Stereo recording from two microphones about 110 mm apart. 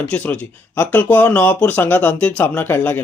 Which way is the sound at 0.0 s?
15° left (ahead or behind).